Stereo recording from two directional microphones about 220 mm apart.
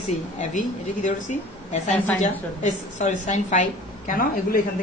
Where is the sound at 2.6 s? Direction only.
35° left (ahead or behind).